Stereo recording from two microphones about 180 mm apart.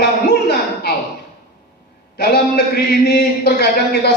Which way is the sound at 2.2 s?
65° left (ahead or behind).